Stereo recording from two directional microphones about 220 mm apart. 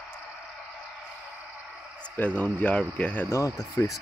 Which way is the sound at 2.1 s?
5° left (ahead or behind).